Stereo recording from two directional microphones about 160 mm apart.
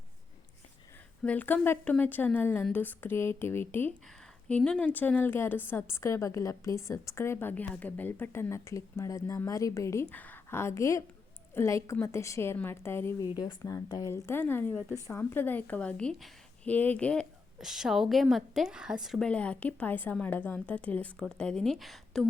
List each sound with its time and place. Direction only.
1.2 s a woman's voice: 10° left (ahead or behind)